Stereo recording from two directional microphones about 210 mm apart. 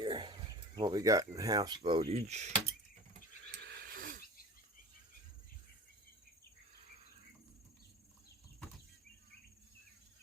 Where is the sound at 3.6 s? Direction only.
50° right (ahead or behind).